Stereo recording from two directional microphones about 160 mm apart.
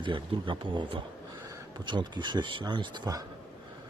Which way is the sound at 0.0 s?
30° right (ahead or behind).